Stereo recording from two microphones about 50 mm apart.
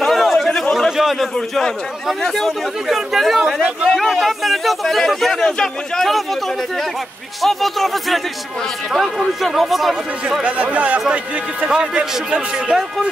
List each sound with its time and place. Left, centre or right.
0.0 s chatter: centre
0.7 s a sound: centre
2.2 s speech: centre
2.9 s speech: centre
3.9 s speech: centre
7.4 s speech: centre
9.4 s speech: centre
10.4 s speech: right